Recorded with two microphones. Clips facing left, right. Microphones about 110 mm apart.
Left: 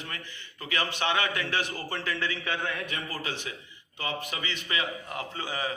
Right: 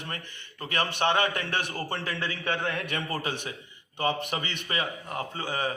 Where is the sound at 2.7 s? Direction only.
65° right (ahead or behind).